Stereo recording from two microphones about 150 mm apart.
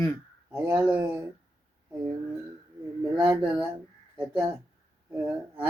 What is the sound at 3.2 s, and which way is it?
Speech, 15° right (ahead or behind).